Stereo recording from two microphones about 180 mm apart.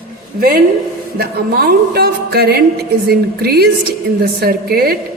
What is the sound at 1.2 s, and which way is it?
Speech, 55° right (ahead or behind).